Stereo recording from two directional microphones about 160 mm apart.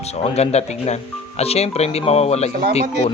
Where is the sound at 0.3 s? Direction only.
40° left (ahead or behind).